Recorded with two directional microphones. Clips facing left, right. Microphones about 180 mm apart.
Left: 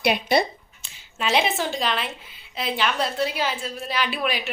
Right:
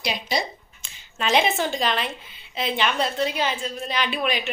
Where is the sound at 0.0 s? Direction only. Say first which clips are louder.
Left 6 dB; 60° left (ahead or behind).